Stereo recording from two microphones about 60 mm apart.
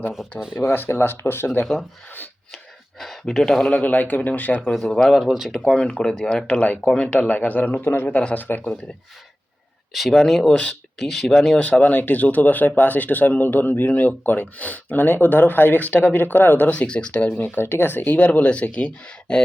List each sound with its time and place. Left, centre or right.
0.5 s speech: left
3.0 s speech: centre
3.7 s speech: left
4.7 s speech: centre
5.1 s speech: centre
5.6 s speech: centre
6.8 s speech: centre
7.1 s speech: left
9.9 s speech: centre
10.5 s speech: centre
11.0 s speech: centre
11.6 s speech: left
16.7 s speech: centre
17.2 s speech: left; by 19.4 s centre